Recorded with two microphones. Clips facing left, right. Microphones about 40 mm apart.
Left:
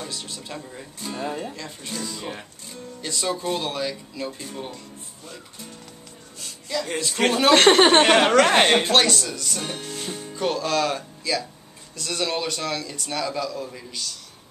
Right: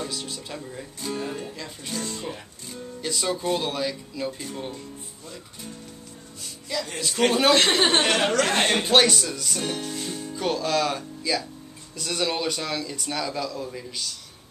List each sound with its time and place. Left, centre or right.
0.0 s speech: centre
1.5 s a man's voice: centre
2.1 s speech: left
2.7 s a man's voice: centre
7.2 s a man's voice: centre
7.5 s speech: left
8.8 s a man's voice: centre
9.9 s speech: left
10.3 s a man's voice: centre